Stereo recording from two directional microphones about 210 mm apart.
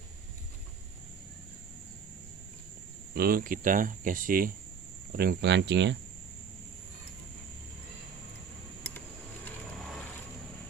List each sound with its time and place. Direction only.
3.2 s speech: 45° right (ahead or behind)